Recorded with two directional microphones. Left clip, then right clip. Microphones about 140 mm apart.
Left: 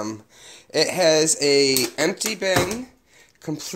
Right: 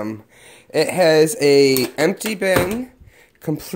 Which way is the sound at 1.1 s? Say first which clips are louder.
Right 5 dB; 40° right (ahead or behind).